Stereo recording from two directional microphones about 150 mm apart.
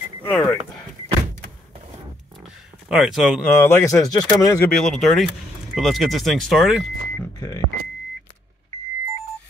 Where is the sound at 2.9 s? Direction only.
Centre (ahead or behind).